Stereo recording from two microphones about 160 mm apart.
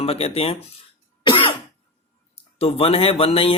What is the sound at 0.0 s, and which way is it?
Speech, 40° left (ahead or behind).